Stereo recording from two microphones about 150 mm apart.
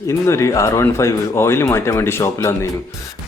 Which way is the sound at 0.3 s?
20° left (ahead or behind).